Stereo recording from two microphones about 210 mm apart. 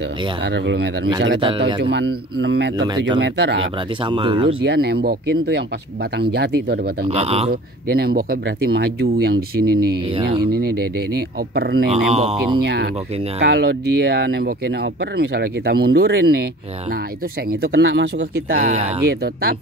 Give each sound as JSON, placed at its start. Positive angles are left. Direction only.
{"t": 0.5, "sound": "speech", "side_deg": -55}
{"t": 1.4, "sound": "speech", "side_deg": -25}
{"t": 1.8, "sound": "speech", "side_deg": -55}
{"t": 4.0, "sound": "speech", "side_deg": -25}
{"t": 4.6, "sound": "speech", "side_deg": -50}
{"t": 7.1, "sound": "speech", "side_deg": -30}
{"t": 7.9, "sound": "speech", "side_deg": -45}
{"t": 11.5, "sound": "speech", "side_deg": -50}
{"t": 11.9, "sound": "speech", "side_deg": -30}
{"t": 13.4, "sound": "speech", "side_deg": -50}
{"t": 17.5, "sound": "speech", "side_deg": -55}
{"t": 18.5, "sound": "speech", "side_deg": -40}